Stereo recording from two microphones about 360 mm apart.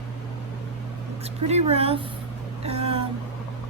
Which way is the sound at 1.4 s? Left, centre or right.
Centre.